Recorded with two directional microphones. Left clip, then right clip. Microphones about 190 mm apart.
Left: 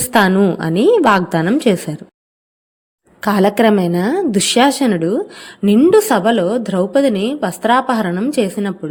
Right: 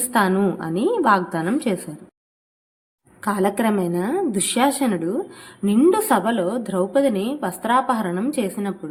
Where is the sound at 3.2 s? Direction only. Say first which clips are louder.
Left 8 dB; 40° left (ahead or behind).